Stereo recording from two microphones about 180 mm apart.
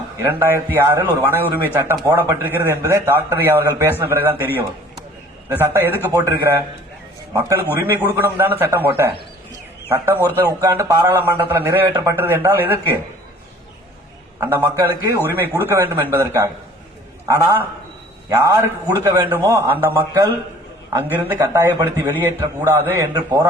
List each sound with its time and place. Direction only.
0.2 s a man's voice: 10° right (ahead or behind)
5.5 s a man's voice: 10° right (ahead or behind)
14.3 s a man's voice: 15° right (ahead or behind)